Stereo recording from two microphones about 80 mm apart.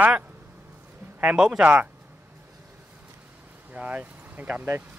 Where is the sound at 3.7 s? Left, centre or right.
Centre.